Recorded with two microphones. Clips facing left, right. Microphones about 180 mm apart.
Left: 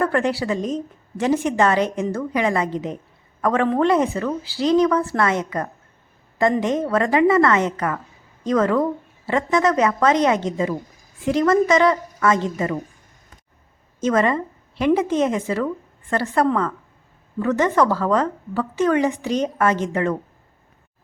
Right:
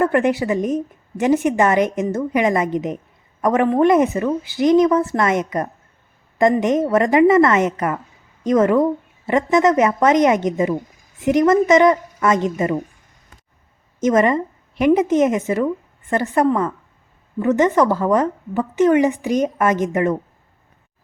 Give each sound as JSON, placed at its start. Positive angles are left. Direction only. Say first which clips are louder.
{"t": 0.0, "sound": "a woman's voice", "louder": "right 4 dB", "side_deg": -15}
{"t": 14.0, "sound": "a woman's voice", "louder": "right 3 dB", "side_deg": -20}